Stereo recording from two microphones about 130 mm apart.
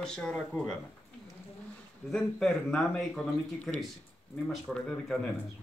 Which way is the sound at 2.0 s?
5° left (ahead or behind).